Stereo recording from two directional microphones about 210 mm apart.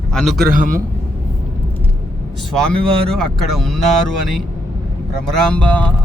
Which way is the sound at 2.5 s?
5° left (ahead or behind).